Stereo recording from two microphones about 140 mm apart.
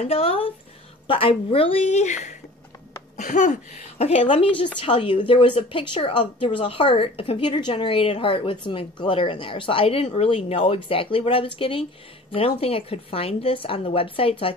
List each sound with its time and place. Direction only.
0.0 s a woman's voice: 45° left (ahead or behind)